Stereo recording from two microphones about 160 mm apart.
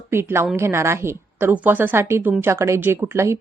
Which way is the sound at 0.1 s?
15° right (ahead or behind).